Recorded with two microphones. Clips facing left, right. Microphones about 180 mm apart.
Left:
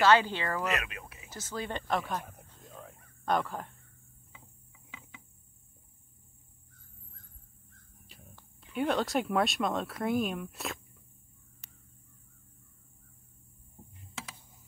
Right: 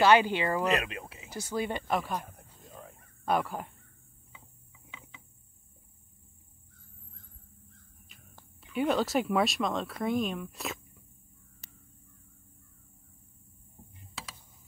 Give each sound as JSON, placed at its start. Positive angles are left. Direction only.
{"t": 0.0, "sound": "speech", "side_deg": -15}
{"t": 0.7, "sound": "speech", "side_deg": -30}
{"t": 1.3, "sound": "a sound", "side_deg": -15}
{"t": 3.3, "sound": "speech", "side_deg": -10}
{"t": 8.1, "sound": "a sound", "side_deg": 35}
{"t": 8.7, "sound": "speech", "side_deg": -5}